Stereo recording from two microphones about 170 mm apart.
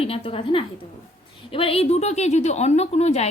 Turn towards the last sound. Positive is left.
turn(degrees=40)  # may be behind; listen again after turning